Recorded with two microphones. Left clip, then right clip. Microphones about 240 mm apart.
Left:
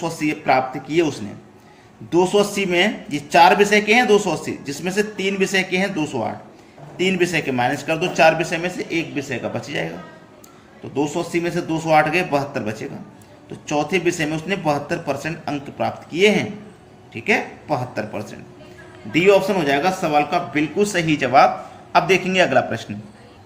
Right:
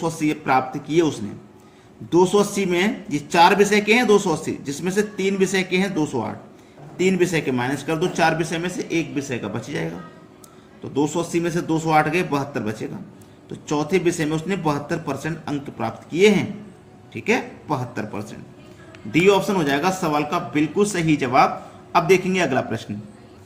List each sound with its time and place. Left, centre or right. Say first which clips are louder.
0.0 s a man's voice: left 1 dB; centre
10.9 s a man's voice: even; right